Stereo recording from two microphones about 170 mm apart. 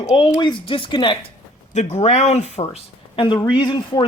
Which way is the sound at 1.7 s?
40° left (ahead or behind).